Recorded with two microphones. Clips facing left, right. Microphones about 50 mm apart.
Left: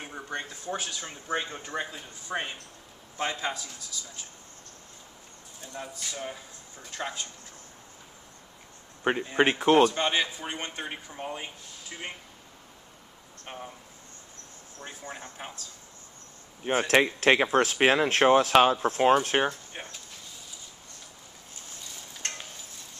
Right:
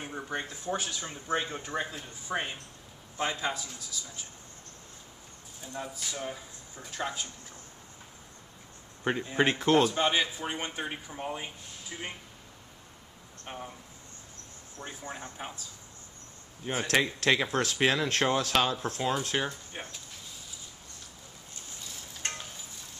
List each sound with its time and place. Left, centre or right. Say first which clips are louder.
0.0 s speech: even; centre
5.6 s speech: right 1 dB; centre
9.2 s speech: left 3 dB; centre
11.1 s speech: even; centre
13.5 s speech: even; centre
15.4 s speech: right 1 dB; centre
16.7 s speech: left 5 dB; left
18.9 s speech: left 9 dB; left
19.7 s speech: even; centre